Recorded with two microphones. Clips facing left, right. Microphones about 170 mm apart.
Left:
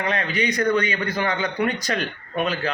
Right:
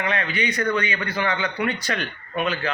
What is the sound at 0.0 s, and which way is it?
A man's voice, 40° left (ahead or behind).